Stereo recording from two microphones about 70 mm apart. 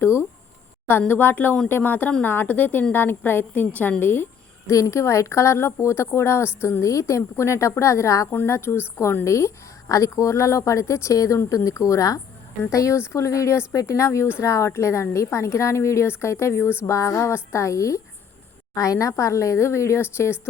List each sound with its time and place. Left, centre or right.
0.0 s a woman's voice: left
4.0 s a sound: left
4.7 s a woman's voice: left
8.3 s a woman's voice: left